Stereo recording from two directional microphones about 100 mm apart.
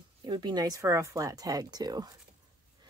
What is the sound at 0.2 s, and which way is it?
A woman's voice, 45° right (ahead or behind).